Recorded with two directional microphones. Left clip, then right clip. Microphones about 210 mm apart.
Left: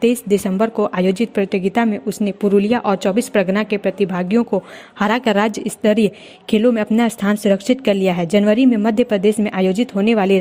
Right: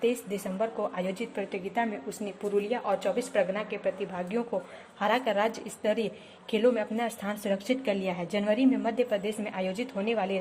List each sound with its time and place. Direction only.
0.0 s speech: 50° left (ahead or behind)